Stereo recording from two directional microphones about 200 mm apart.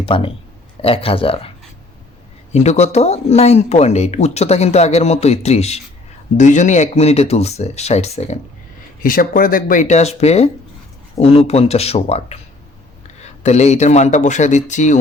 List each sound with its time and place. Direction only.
0.1 s speech: 25° left (ahead or behind)
2.5 s speech: 35° left (ahead or behind)
9.0 s speech: 45° left (ahead or behind)